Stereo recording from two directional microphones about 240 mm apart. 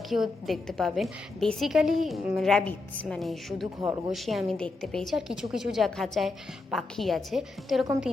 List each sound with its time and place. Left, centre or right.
0.1 s a woman's voice: centre